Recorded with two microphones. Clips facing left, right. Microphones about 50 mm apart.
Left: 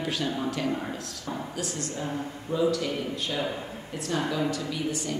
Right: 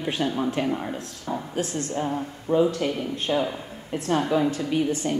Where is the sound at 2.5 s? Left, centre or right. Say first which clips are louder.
Right 4 dB; right.